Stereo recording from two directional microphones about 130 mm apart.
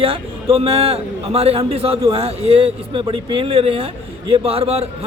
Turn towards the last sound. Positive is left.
turn(degrees=-50)  # may be behind; listen again after turning